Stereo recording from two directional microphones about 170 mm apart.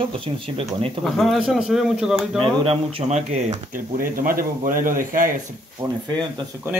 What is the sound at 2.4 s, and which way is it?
Speech, 35° right (ahead or behind).